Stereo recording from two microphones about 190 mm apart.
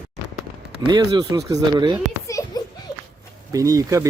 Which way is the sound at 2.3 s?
15° left (ahead or behind).